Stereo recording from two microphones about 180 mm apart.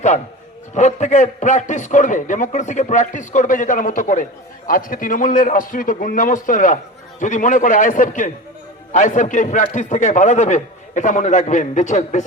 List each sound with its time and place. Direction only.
0.7 s a man's voice: 40° left (ahead or behind)